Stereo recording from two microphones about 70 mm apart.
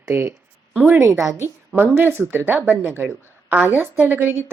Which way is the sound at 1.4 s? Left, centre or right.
Right.